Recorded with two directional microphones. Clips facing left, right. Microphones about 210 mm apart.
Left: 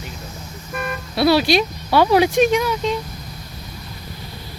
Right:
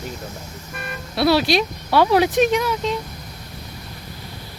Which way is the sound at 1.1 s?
Centre (ahead or behind).